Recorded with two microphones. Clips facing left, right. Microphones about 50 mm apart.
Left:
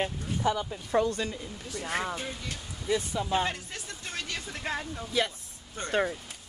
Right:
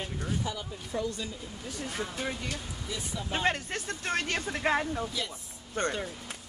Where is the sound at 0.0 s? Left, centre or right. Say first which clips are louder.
Left 5 dB; left.